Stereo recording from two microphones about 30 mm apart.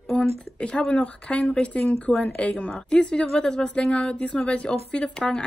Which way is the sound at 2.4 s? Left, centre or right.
Left.